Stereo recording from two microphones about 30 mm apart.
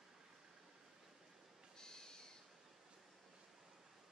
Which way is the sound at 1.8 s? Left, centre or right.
Left.